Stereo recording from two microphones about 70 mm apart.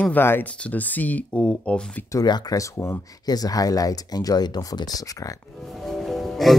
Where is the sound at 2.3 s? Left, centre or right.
Left.